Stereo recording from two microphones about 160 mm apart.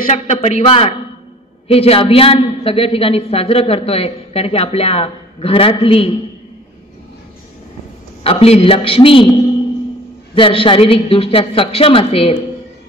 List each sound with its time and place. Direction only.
0.0 s a man's voice: 45° left (ahead or behind)
8.2 s a woman's voice: 40° left (ahead or behind)
10.3 s a woman's voice: 35° left (ahead or behind)